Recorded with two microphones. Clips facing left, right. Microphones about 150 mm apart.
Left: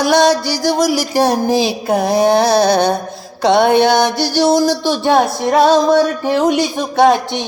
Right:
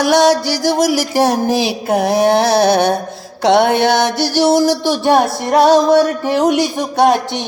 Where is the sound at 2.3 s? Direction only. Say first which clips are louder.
Even; 15° left (ahead or behind).